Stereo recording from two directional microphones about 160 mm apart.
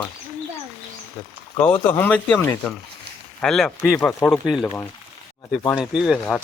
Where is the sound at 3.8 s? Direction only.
15° left (ahead or behind).